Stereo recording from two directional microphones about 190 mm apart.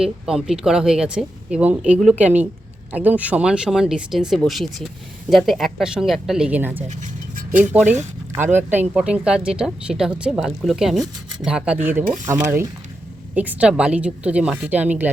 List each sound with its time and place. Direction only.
0.0 s a woman's voice: 5° right (ahead or behind)